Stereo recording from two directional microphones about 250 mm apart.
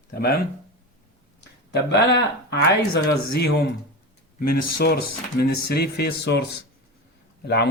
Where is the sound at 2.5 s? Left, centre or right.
Left.